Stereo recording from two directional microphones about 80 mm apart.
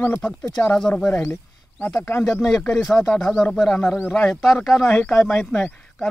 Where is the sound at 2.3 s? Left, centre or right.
Centre.